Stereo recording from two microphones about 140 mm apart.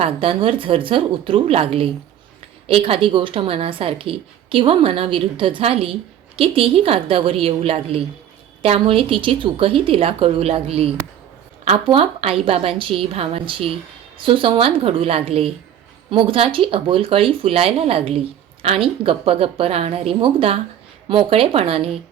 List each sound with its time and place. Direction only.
0.0 s a woman's voice: 40° right (ahead or behind)